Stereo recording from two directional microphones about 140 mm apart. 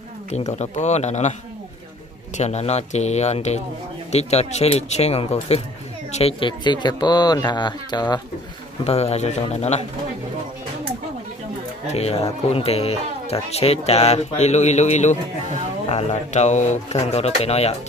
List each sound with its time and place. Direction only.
0.5 s speech: 55° left (ahead or behind)
2.3 s speech: 50° left (ahead or behind)
6.6 s speech: 30° left (ahead or behind)
8.8 s speech: 45° left (ahead or behind)
11.9 s speech: 45° left (ahead or behind)